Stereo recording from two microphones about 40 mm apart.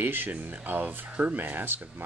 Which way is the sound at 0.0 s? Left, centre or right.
Right.